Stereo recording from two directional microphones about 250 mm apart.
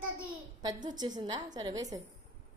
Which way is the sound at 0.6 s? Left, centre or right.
Centre.